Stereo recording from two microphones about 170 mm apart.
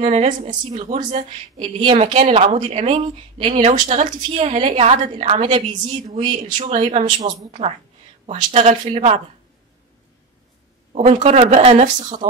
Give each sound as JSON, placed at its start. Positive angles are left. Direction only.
{"t": 0.0, "sound": "a woman's voice", "side_deg": -45}
{"t": 1.6, "sound": "speech", "side_deg": -30}
{"t": 5.7, "sound": "a woman's voice", "side_deg": -25}
{"t": 6.3, "sound": "a woman's voice", "side_deg": -45}
{"t": 10.9, "sound": "speech", "side_deg": -35}